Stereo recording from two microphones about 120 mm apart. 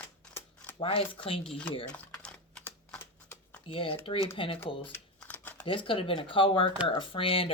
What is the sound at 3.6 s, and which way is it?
Speech, 45° left (ahead or behind).